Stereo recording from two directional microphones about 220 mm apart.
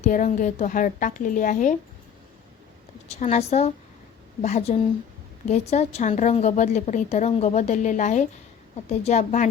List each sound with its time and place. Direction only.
0.0 s a woman's voice: 35° left (ahead or behind)
3.1 s a woman's voice: 30° left (ahead or behind)